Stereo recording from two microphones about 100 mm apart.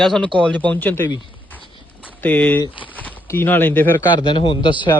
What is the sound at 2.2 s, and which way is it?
A man's voice, 15° left (ahead or behind).